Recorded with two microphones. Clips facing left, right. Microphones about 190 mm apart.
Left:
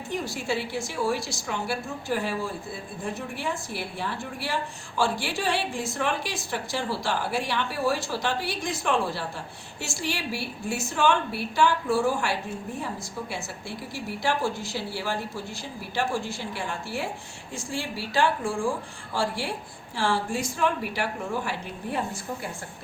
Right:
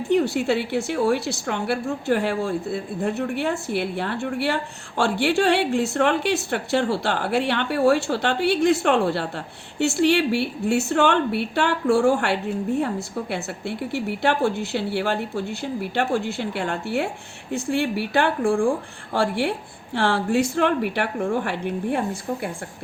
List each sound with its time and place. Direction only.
0.1 s a woman's voice: 65° right (ahead or behind)